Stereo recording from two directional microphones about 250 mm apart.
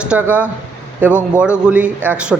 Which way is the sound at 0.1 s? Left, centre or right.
Centre.